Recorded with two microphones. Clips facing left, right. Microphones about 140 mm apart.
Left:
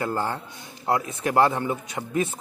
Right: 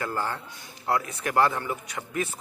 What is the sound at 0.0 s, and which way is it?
A man's voice, 25° left (ahead or behind).